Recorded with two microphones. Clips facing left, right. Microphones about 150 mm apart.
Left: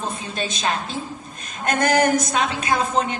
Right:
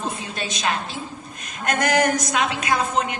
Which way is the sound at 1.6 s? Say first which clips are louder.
Left 2 dB; 30° left (ahead or behind).